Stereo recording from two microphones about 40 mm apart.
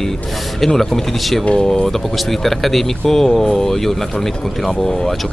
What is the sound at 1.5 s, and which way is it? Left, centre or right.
Speech, centre.